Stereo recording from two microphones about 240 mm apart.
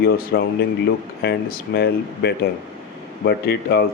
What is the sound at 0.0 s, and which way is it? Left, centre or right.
Speech, left.